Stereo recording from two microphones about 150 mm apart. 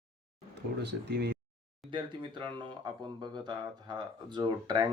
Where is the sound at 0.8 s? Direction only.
90° right.